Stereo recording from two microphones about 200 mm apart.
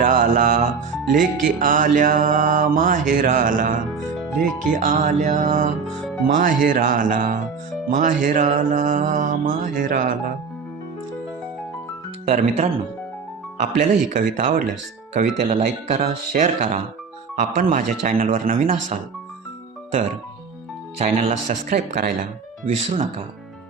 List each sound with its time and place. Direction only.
0.0 s mantra: 40° right (ahead or behind)
12.2 s speech: 45° right (ahead or behind)
13.6 s mantra: 40° right (ahead or behind)
18.0 s speech: 40° right (ahead or behind)
21.0 s mantra: 35° right (ahead or behind)